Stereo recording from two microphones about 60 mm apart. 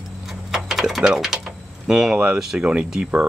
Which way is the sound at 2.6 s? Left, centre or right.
Centre.